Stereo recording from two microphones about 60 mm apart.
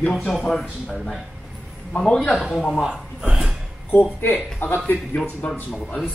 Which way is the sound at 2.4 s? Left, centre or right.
Centre.